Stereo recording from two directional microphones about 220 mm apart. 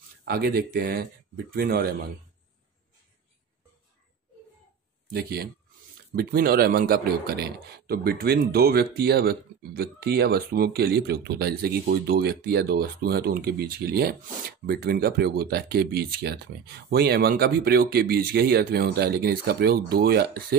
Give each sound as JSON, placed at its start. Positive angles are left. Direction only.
{"t": 0.2, "sound": "a man's voice", "side_deg": -45}
{"t": 5.1, "sound": "a man's voice", "side_deg": -45}